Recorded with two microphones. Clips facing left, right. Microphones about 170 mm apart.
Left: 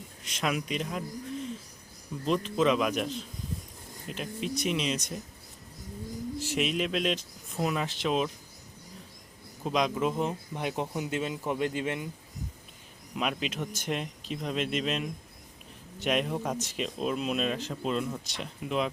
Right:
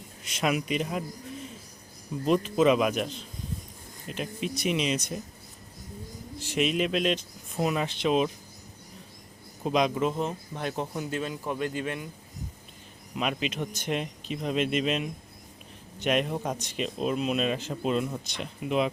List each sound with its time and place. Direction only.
0.3 s speech: 5° right (ahead or behind)
2.2 s speech: 10° right (ahead or behind)
6.4 s speech: centre (ahead or behind)
9.6 s speech: centre (ahead or behind)
10.2 s a man's voice: 15° left (ahead or behind)
13.1 s speech: centre (ahead or behind)